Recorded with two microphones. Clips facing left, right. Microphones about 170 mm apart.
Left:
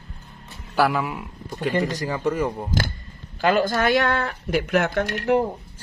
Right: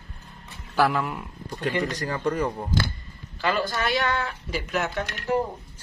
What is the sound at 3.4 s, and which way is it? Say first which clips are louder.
Speech: left 6 dB; 50° left (ahead or behind).